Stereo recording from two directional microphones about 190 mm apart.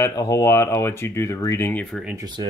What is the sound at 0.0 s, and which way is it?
Speech, 20° left (ahead or behind).